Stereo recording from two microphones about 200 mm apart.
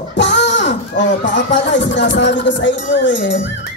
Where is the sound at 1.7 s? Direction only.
65° left (ahead or behind).